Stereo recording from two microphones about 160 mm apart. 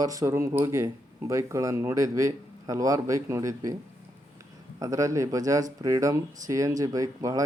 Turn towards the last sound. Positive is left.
turn(degrees=-20)  # may be behind; listen again after turning